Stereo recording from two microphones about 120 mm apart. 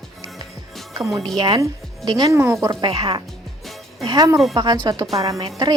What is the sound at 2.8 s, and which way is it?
Speech, 50° right (ahead or behind).